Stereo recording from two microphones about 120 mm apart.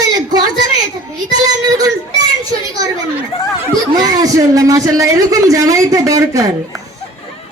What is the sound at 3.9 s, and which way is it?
A man's voice, 30° right (ahead or behind).